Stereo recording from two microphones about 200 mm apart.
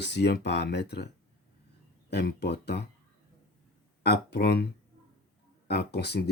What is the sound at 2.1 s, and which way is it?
Speech, 55° left (ahead or behind).